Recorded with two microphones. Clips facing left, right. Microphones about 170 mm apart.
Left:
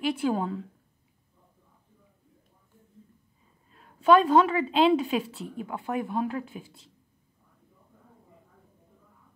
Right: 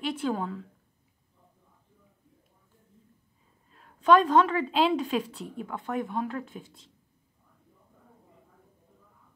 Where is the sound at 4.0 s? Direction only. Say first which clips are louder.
Left 1 dB; 5° left (ahead or behind).